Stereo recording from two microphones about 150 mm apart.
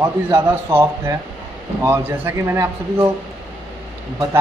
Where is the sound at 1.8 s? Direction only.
15° right (ahead or behind).